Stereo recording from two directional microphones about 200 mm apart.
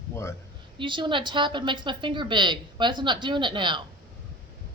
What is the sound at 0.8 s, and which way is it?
A woman's voice, 25° right (ahead or behind).